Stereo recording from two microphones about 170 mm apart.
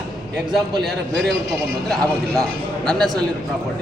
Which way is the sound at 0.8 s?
Centre (ahead or behind).